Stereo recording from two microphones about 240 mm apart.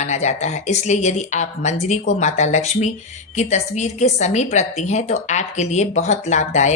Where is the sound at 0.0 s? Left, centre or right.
Left.